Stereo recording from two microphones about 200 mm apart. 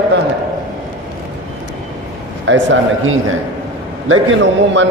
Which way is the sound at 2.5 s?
65° right (ahead or behind).